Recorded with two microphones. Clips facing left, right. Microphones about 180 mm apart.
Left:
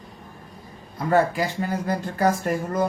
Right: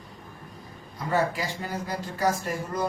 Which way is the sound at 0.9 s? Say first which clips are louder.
Left 6 dB; 55° left (ahead or behind).